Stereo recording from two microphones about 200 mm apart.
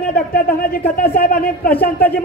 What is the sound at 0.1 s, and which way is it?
A man's voice, 50° left (ahead or behind).